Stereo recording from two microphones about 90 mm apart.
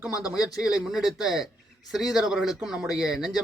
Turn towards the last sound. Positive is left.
turn(degrees=-5)  # may be behind; listen again after turning